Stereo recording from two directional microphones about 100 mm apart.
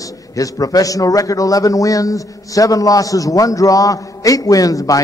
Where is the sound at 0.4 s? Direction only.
35° left (ahead or behind).